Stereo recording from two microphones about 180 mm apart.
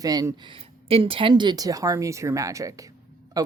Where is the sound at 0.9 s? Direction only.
30° right (ahead or behind).